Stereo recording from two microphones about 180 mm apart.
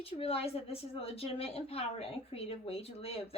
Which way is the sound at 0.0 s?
35° left (ahead or behind).